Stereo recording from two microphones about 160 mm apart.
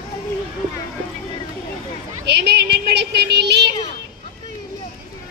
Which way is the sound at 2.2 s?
90° right.